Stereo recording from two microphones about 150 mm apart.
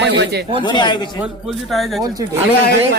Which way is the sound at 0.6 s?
30° left (ahead or behind).